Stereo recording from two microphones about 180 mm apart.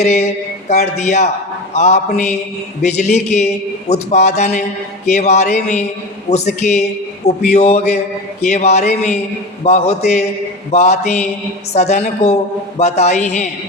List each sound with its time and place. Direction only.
0.0 s speech: 40° left (ahead or behind)